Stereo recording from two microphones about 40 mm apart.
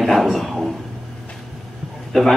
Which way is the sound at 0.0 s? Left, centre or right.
Centre.